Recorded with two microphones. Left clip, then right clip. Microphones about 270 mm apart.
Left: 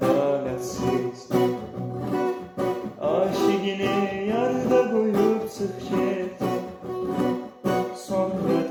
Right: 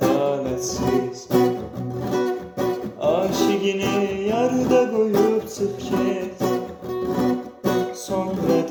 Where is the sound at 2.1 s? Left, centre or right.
Right.